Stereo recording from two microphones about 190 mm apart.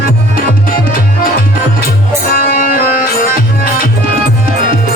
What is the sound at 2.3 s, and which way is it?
Music, 50° left (ahead or behind).